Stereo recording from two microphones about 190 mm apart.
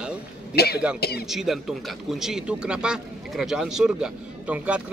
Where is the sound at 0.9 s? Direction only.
55° left (ahead or behind).